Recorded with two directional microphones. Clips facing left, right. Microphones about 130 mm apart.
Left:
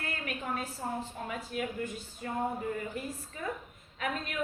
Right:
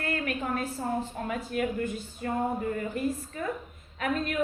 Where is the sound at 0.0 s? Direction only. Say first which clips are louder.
Right 7 dB; 55° right (ahead or behind).